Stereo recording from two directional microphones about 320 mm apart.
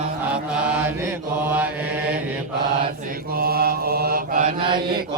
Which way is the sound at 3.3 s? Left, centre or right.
Right.